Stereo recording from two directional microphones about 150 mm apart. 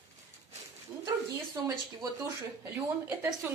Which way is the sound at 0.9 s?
35° right (ahead or behind).